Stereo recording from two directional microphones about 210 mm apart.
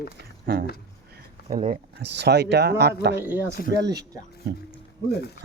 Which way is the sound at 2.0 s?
55° right (ahead or behind).